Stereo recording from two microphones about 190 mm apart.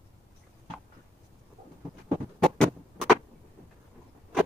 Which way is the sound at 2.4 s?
Centre (ahead or behind).